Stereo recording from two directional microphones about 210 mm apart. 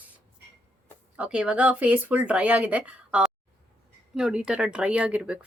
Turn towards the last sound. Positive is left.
turn(degrees=-5)  # may be behind; listen again after turning